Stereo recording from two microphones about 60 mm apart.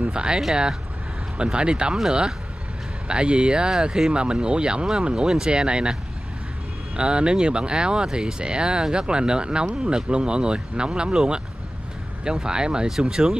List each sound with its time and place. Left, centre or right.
0.0 s speech: centre
7.0 s speech: centre